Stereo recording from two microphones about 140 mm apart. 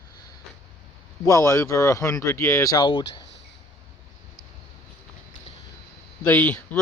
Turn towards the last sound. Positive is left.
turn(degrees=10)  # may be behind; listen again after turning